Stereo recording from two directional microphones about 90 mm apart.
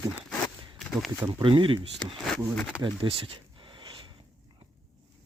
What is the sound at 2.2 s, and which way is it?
Speech, 10° left (ahead or behind).